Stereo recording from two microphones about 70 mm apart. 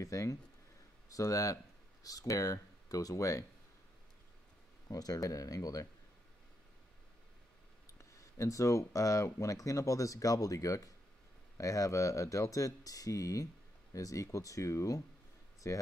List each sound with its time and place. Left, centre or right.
0.0 s speech: left
4.8 s speech: left
7.8 s speech: left